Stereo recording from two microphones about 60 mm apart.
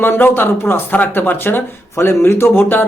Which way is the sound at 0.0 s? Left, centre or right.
Left.